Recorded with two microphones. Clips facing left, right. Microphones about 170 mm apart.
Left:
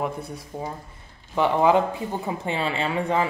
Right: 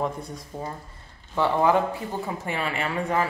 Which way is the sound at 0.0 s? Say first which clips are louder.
Even; 10° left (ahead or behind).